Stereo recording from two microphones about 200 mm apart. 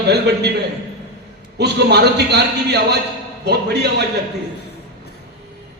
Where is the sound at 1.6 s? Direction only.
55° right (ahead or behind).